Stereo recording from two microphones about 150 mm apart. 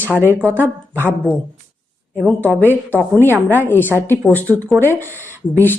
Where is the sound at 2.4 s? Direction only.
10° left (ahead or behind).